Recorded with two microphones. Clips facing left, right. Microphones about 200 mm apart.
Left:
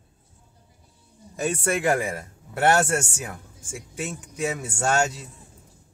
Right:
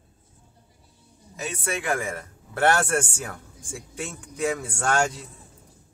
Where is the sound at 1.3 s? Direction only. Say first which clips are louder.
Left 6 dB; 50° left (ahead or behind).